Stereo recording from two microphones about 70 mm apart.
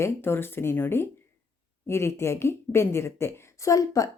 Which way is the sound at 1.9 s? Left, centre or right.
Left.